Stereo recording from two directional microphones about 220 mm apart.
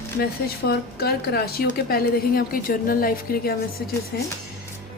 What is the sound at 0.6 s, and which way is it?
A woman's voice, 45° left (ahead or behind).